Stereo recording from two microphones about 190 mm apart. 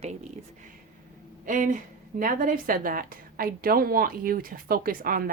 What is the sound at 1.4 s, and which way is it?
Speech, 45° right (ahead or behind).